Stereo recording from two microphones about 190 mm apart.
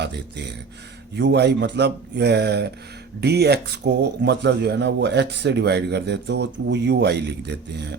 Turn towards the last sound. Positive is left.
turn(degrees=-65)  # may be behind; listen again after turning